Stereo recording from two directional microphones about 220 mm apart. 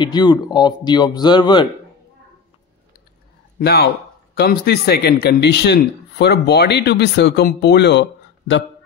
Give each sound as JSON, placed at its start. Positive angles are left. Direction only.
{"t": 0.0, "sound": "speech", "side_deg": 20}
{"t": 3.5, "sound": "a man's voice", "side_deg": 45}